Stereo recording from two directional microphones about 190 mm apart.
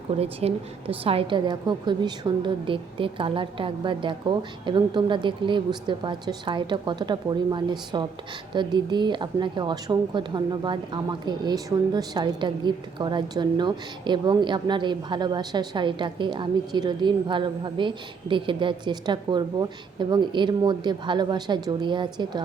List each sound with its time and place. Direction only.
0.2 s a woman's voice: 30° right (ahead or behind)